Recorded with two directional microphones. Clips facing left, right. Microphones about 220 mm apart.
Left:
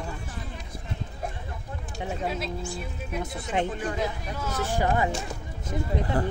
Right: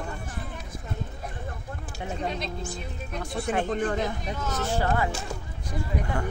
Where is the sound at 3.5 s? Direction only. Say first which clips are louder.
Right 1 dB; 55° right (ahead or behind).